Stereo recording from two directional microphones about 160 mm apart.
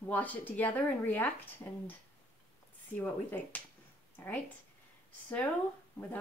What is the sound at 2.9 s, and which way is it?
Speech, 10° left (ahead or behind).